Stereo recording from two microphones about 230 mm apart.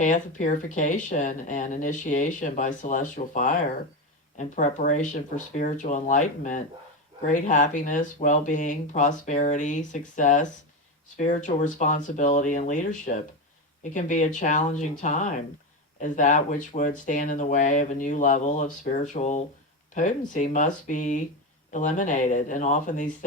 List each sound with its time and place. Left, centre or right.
0.0 s speech: left